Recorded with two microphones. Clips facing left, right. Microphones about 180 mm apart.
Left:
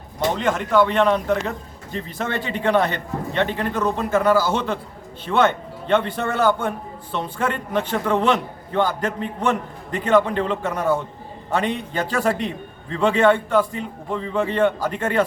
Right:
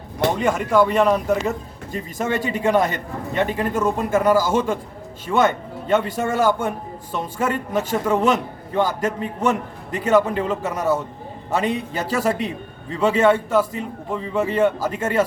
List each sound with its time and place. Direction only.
0.3 s a man's voice: 10° right (ahead or behind)
12.1 s a man's voice: 5° right (ahead or behind)